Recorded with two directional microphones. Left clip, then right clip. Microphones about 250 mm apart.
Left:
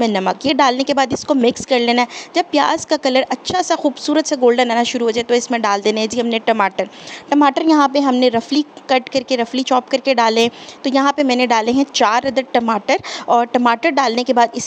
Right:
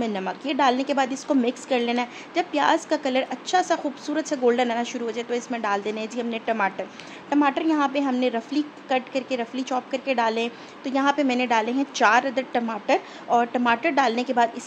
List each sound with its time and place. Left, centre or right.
0.0 s a woman's voice: left